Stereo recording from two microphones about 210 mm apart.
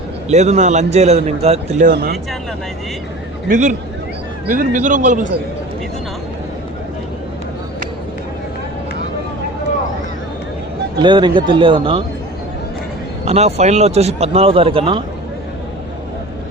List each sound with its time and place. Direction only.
0.3 s a man's voice: 30° right (ahead or behind)
1.9 s speech: 50° right (ahead or behind)
3.5 s a man's voice: 40° right (ahead or behind)
11.0 s a man's voice: 20° right (ahead or behind)
13.2 s a man's voice: 30° right (ahead or behind)